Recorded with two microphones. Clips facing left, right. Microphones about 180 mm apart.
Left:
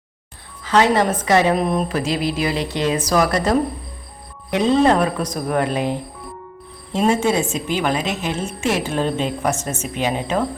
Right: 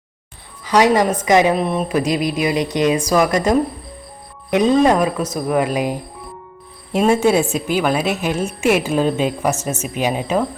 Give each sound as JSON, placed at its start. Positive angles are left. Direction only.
{"t": 0.6, "sound": "a woman's voice", "side_deg": -15}
{"t": 1.5, "sound": "speech", "side_deg": 0}
{"t": 2.0, "sound": "speech", "side_deg": -15}
{"t": 7.5, "sound": "speech", "side_deg": -10}